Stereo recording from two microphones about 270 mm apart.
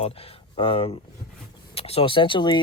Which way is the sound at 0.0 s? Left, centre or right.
Left.